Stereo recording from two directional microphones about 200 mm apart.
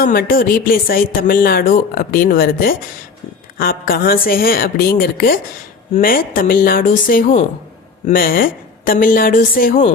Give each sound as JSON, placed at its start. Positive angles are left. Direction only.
{"t": 0.0, "sound": "speech", "side_deg": 45}